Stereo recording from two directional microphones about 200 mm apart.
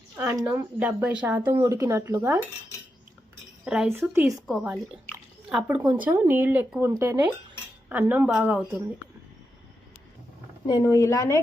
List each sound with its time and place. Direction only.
0.2 s a woman's voice: 10° right (ahead or behind)
3.6 s a woman's voice: 5° right (ahead or behind)
5.1 s a sound: 10° right (ahead or behind)
6.0 s a woman's voice: 10° right (ahead or behind)
10.7 s speech: 15° left (ahead or behind)